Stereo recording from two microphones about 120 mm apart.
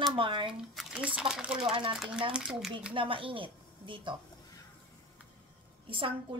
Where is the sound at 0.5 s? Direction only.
5° right (ahead or behind).